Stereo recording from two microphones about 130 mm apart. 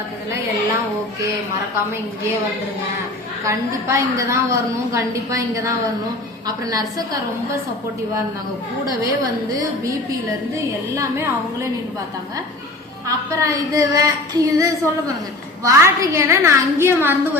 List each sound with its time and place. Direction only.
3.4 s a woman's voice: 25° right (ahead or behind)
9.5 s a woman's voice: 25° right (ahead or behind)
13.1 s a woman's voice: 25° right (ahead or behind)